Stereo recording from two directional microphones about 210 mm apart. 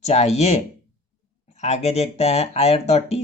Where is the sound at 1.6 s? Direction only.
30° left (ahead or behind).